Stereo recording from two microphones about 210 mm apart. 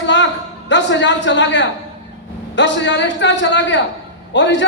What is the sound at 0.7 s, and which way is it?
A woman's voice, 60° left (ahead or behind).